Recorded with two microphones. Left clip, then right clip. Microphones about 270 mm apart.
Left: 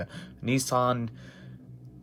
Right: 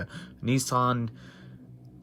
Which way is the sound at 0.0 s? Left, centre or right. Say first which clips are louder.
Even; centre.